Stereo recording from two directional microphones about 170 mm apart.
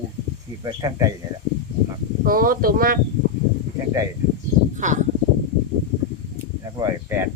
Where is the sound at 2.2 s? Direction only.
55° right (ahead or behind).